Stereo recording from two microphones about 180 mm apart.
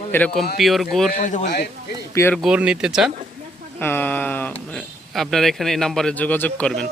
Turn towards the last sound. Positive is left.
turn(degrees=5)  # may be behind; listen again after turning